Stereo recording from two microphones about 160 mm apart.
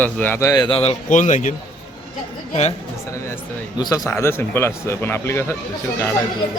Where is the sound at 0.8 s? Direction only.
45° left (ahead or behind).